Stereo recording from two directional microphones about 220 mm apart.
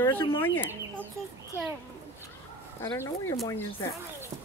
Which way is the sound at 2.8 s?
20° left (ahead or behind).